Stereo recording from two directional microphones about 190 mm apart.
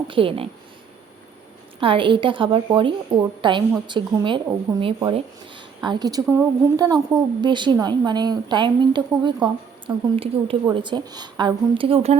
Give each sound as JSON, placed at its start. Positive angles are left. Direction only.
{"t": 0.1, "sound": "a woman's voice", "side_deg": -30}
{"t": 1.8, "sound": "a woman's voice", "side_deg": -25}